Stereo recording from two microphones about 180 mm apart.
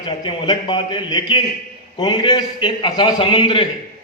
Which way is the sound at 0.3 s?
25° left (ahead or behind).